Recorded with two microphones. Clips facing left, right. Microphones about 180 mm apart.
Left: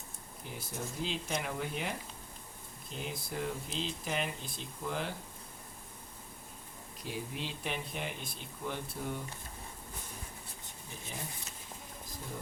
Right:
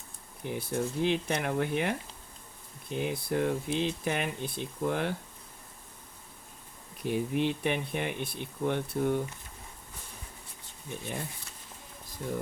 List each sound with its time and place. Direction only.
0.4 s speech: 60° right (ahead or behind)
7.0 s speech: 60° right (ahead or behind)